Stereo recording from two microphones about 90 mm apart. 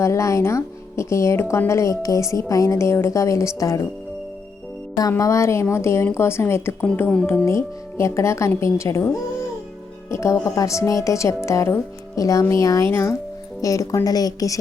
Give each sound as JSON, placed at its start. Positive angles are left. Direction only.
{"t": 0.0, "sound": "a woman's voice", "side_deg": 35}
{"t": 5.1, "sound": "a woman's voice", "side_deg": 35}
{"t": 10.1, "sound": "a woman's voice", "side_deg": 35}